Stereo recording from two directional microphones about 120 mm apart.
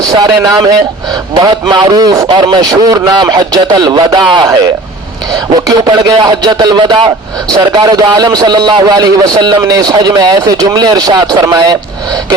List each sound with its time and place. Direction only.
0.1 s a man's voice: 30° right (ahead or behind)
5.3 s a man's voice: 30° right (ahead or behind)